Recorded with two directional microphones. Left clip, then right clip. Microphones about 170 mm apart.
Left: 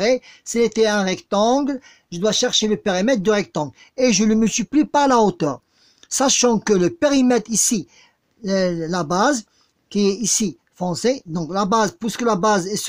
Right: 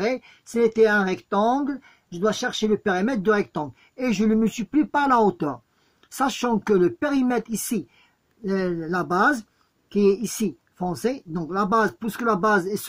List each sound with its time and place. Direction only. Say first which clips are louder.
0.0 s speech: left 7 dB; 40° left (ahead or behind)